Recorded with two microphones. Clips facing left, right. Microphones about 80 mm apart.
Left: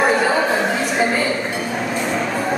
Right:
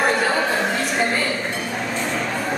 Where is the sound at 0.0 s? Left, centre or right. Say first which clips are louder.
Left 3 dB; centre.